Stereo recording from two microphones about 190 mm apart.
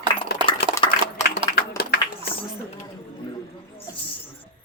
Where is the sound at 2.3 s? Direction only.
55° left (ahead or behind).